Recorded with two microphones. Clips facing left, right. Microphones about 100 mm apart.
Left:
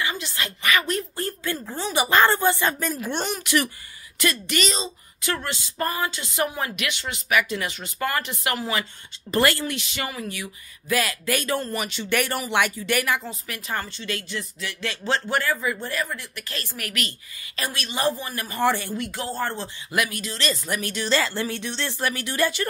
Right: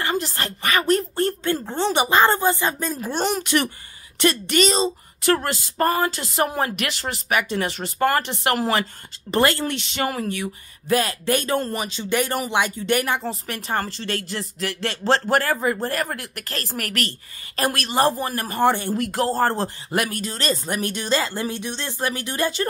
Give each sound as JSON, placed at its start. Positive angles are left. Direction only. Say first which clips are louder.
{"t": 0.0, "sound": "speech", "louder": "right 4 dB", "side_deg": -45}
{"t": 3.0, "sound": "a woman's voice", "louder": "right 4 dB", "side_deg": -40}
{"t": 9.3, "sound": "speech", "louder": "right 2 dB", "side_deg": -25}
{"t": 9.7, "sound": "a woman's voice", "louder": "right 5 dB", "side_deg": -45}
{"t": 11.8, "sound": "a woman's voice", "louder": "right 2 dB", "side_deg": -20}
{"t": 16.7, "sound": "a woman's voice", "louder": "right 5 dB", "side_deg": -40}
{"t": 18.7, "sound": "speech", "louder": "right 2 dB", "side_deg": -25}
{"t": 18.9, "sound": "speech", "louder": "right 7 dB", "side_deg": -45}